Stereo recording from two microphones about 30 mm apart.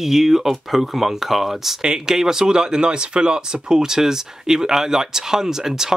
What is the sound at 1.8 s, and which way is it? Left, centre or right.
Speech, right.